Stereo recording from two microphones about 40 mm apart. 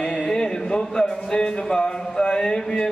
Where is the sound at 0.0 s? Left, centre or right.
Centre.